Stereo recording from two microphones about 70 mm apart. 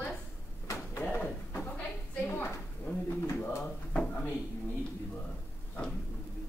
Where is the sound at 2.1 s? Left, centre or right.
Left.